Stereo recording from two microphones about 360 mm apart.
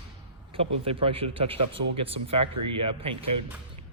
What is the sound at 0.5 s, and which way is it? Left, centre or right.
Speech, centre.